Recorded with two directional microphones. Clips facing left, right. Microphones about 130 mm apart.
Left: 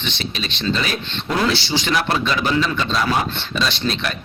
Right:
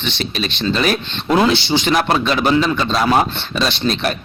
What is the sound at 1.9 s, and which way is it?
A man's voice, 45° right (ahead or behind).